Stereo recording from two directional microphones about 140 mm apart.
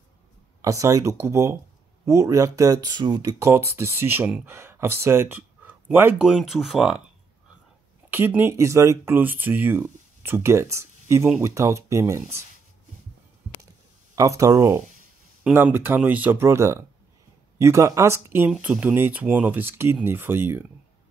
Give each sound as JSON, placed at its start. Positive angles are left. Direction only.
{"t": 0.6, "sound": "speech", "side_deg": -20}
{"t": 3.2, "sound": "speech", "side_deg": -20}
{"t": 6.2, "sound": "speech", "side_deg": 0}
{"t": 8.1, "sound": "speech", "side_deg": -15}
{"t": 14.1, "sound": "speech", "side_deg": -25}